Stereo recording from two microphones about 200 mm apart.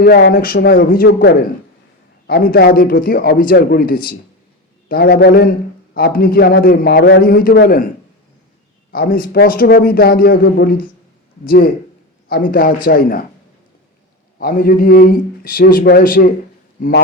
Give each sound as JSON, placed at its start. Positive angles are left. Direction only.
{"t": 0.0, "sound": "a man's voice", "side_deg": 55}
{"t": 8.9, "sound": "a man's voice", "side_deg": 45}
{"t": 14.3, "sound": "a man's voice", "side_deg": 45}